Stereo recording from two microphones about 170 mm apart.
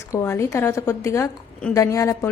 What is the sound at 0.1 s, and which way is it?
A woman's voice, 15° left (ahead or behind).